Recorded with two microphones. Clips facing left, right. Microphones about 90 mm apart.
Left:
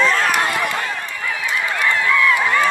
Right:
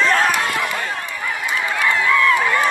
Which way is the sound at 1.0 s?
15° right (ahead or behind).